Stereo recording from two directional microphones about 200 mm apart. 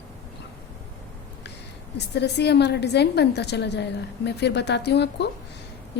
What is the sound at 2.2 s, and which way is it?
A woman's voice, 55° left (ahead or behind).